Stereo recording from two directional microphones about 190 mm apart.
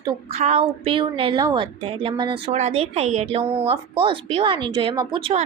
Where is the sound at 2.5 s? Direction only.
35° right (ahead or behind).